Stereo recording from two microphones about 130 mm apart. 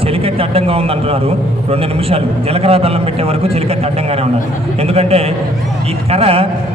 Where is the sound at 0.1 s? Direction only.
45° right (ahead or behind).